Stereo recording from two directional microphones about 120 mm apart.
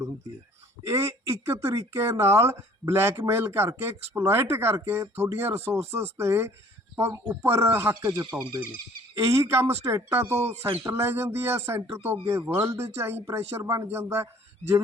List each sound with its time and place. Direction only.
0.9 s speech: 25° right (ahead or behind)